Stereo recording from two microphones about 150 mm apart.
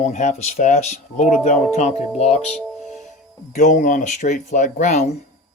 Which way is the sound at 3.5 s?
55° left (ahead or behind).